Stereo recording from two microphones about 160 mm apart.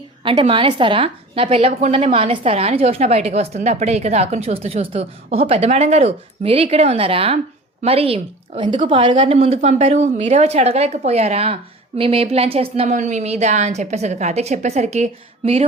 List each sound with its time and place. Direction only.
0.3 s a woman's voice: 35° right (ahead or behind)